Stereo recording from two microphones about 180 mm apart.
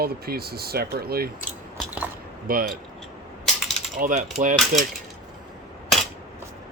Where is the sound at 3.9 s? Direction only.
50° right (ahead or behind).